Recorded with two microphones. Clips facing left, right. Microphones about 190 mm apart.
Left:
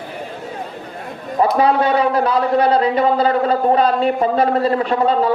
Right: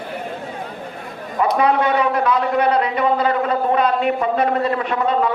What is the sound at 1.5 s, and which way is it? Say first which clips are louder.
A man's voice: left 1 dB; 30° left (ahead or behind).